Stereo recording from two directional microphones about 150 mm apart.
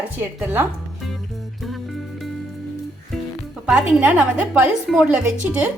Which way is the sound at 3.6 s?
10° right (ahead or behind).